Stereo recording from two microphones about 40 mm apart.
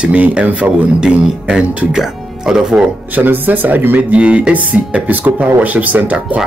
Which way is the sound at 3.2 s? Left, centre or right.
Right.